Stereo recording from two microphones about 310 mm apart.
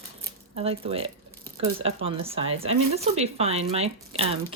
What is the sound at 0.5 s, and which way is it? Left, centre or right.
Speech, centre.